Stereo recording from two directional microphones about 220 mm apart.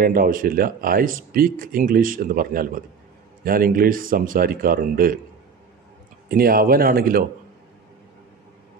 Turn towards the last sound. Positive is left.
turn(degrees=-40)  # may be behind; listen again after turning